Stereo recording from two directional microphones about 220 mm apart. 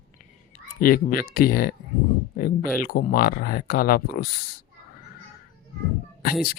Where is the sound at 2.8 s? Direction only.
40° left (ahead or behind).